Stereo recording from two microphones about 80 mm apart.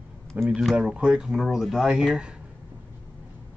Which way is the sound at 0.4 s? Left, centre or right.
Centre.